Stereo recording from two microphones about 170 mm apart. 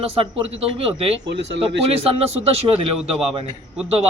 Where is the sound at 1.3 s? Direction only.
90° right.